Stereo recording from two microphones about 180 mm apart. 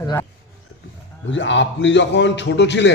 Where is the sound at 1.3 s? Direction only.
90° left; by 2.9 s 75° left (ahead or behind).